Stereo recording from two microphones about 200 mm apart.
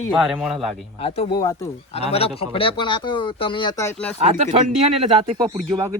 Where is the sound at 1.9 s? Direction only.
30° left (ahead or behind); by 4.1 s 15° left (ahead or behind).